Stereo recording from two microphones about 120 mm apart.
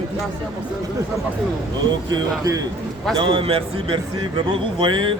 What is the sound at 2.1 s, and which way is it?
Speech, 30° right (ahead or behind).